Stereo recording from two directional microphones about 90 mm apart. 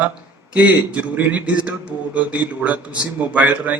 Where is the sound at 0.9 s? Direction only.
15° right (ahead or behind).